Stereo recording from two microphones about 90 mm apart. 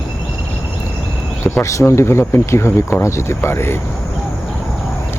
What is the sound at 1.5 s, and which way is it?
Speech, 35° left (ahead or behind).